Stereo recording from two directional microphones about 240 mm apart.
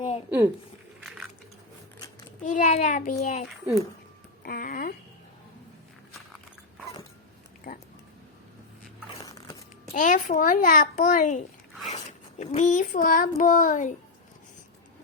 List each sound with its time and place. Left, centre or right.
0.3 s speech: centre
1.0 s a sound: centre
2.4 s a child's voice: left
4.4 s speech: left
7.7 s a child's voice: left
9.2 s biting: centre
9.9 s a child's voice: left